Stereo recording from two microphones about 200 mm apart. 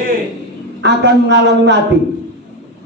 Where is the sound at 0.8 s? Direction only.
60° right (ahead or behind).